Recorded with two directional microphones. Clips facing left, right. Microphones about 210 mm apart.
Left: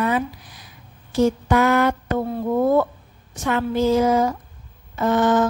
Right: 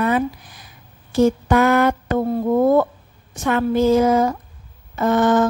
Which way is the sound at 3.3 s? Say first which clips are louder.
Right 3 dB; 50° right (ahead or behind).